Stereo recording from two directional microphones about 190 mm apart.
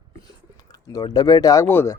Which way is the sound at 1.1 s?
20° left (ahead or behind).